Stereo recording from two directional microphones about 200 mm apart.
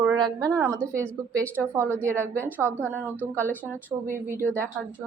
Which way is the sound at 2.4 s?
10° right (ahead or behind).